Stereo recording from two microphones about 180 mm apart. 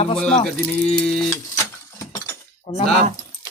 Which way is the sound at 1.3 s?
15° left (ahead or behind).